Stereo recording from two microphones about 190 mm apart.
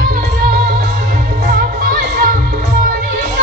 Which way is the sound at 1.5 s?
50° right (ahead or behind).